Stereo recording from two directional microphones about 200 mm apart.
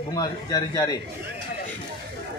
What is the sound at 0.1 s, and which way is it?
Speech, 20° left (ahead or behind).